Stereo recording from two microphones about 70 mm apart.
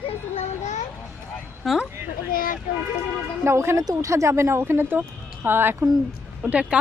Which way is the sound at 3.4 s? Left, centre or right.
Right.